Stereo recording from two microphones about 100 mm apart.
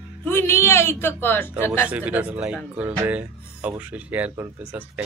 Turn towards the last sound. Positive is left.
turn(degrees=-15)  # may be behind; listen again after turning